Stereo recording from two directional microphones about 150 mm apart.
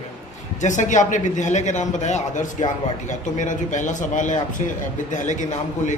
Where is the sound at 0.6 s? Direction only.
55° left (ahead or behind).